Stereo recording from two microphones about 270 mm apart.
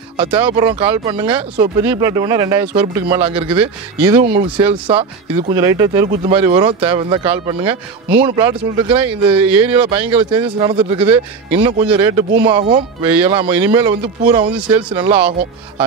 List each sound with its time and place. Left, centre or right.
0.2 s speech: centre